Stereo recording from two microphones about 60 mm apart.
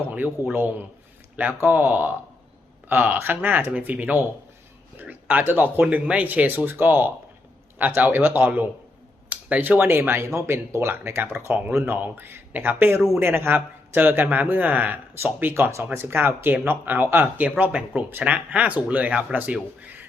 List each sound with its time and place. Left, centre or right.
0.1 s speech: right
5.8 s speech: right
9.9 s speech: right
11.9 s speech: right
15.2 s speech: right
15.7 s speech: right
17.6 s speech: right